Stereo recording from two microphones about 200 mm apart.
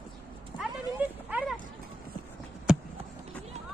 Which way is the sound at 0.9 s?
10° right (ahead or behind).